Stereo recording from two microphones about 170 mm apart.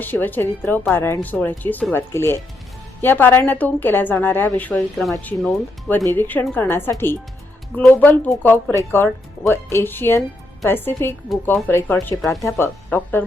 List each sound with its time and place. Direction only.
0.0 s a woman's voice: 10° left (ahead or behind)
11.3 s speech: centre (ahead or behind)
11.7 s a woman's voice: 15° left (ahead or behind)